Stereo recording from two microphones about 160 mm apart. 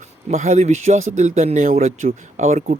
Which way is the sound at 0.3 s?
45° right (ahead or behind).